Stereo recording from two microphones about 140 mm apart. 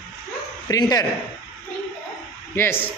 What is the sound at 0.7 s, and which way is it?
Speech, 25° left (ahead or behind).